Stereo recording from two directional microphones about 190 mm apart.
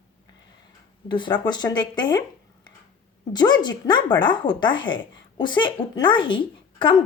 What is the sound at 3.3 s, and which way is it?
Speech, 20° left (ahead or behind).